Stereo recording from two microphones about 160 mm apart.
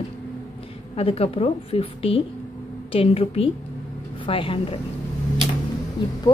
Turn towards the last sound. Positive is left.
turn(degrees=25)  # may be behind; listen again after turning